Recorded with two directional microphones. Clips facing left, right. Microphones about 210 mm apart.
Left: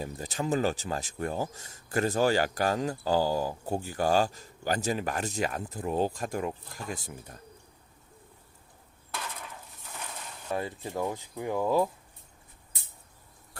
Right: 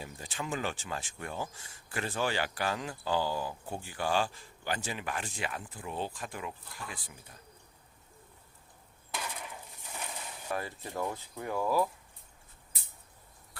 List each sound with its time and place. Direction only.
0.0 s speech: 40° left (ahead or behind)
9.1 s a sound: 10° right (ahead or behind)
10.5 s speech: 20° left (ahead or behind)